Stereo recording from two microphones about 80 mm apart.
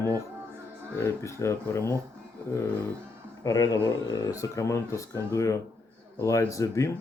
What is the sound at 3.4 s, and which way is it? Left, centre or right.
A man's voice, left.